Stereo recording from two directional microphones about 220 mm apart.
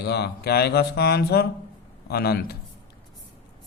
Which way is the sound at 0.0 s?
50° left (ahead or behind).